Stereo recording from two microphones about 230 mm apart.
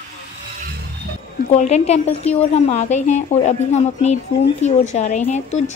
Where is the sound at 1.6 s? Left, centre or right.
Left.